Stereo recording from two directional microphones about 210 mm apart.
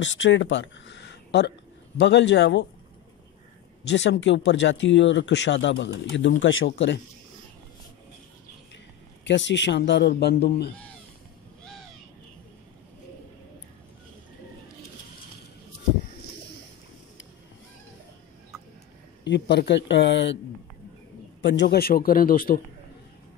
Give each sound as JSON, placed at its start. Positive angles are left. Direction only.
{"t": 0.0, "sound": "speech", "side_deg": 60}
{"t": 3.8, "sound": "speech", "side_deg": 55}
{"t": 9.2, "sound": "speech", "side_deg": 60}
{"t": 19.2, "sound": "speech", "side_deg": 55}
{"t": 21.4, "sound": "a man's voice", "side_deg": 55}